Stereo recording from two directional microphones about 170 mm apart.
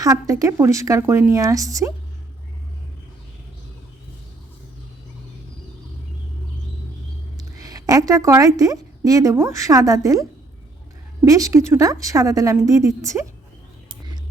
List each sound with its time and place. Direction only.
0.0 s speech: 20° right (ahead or behind)
7.3 s a woman's voice: 20° right (ahead or behind)
11.3 s speech: 20° right (ahead or behind)